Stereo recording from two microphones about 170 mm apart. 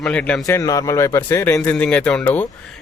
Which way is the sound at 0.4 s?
20° left (ahead or behind).